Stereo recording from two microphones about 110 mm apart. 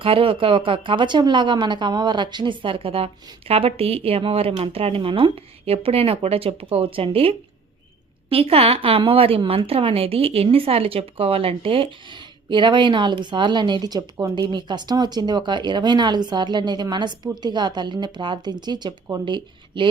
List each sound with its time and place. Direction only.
0.0 s a woman's voice: 55° right (ahead or behind); by 19.2 s 35° right (ahead or behind)
19.2 s speech: 50° right (ahead or behind)